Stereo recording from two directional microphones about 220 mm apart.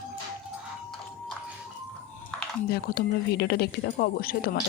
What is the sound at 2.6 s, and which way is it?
Speech, 45° left (ahead or behind).